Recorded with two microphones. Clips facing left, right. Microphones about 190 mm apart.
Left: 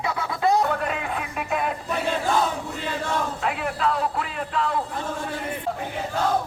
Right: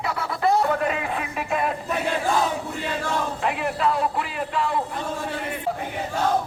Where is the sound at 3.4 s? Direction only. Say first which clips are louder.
Right 4 dB; centre (ahead or behind).